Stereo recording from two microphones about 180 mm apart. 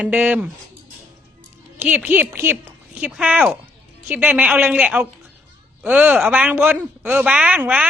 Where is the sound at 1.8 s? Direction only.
10° right (ahead or behind).